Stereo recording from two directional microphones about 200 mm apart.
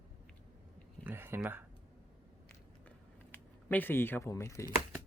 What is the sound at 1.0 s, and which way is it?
Speech, 10° right (ahead or behind).